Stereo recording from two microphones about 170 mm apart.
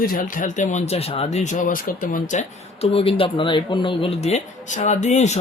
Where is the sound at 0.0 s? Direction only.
55° left (ahead or behind).